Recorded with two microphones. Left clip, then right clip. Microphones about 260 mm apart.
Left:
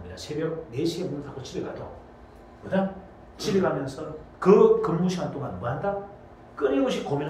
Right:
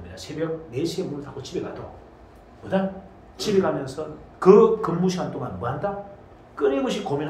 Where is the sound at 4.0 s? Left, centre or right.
Right.